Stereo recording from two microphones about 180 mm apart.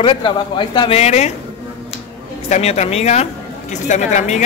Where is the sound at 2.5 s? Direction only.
35° left (ahead or behind).